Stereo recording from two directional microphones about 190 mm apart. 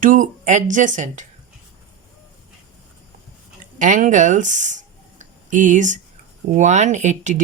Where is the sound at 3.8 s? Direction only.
40° right (ahead or behind).